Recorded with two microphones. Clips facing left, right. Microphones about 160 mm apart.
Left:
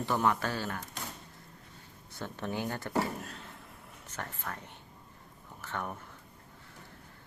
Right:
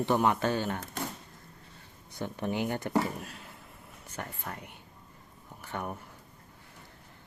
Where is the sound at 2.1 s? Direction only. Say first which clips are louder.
Right 4 dB; 15° right (ahead or behind).